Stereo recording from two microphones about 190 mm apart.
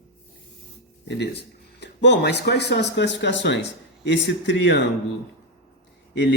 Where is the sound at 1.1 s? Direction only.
60° left (ahead or behind).